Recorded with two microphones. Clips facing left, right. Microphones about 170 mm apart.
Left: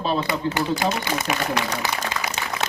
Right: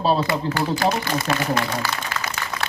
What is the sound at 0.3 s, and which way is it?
Speech, 20° left (ahead or behind).